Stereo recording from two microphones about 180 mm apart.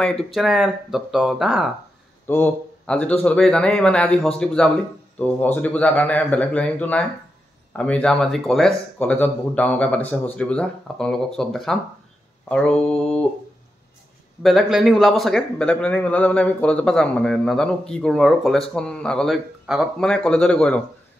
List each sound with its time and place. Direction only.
0.0 s a man's voice: 5° left (ahead or behind)
2.2 s a man's voice: 10° left (ahead or behind)
14.4 s a man's voice: centre (ahead or behind)